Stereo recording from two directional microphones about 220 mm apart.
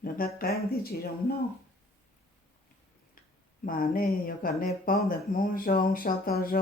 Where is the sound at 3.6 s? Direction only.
40° left (ahead or behind).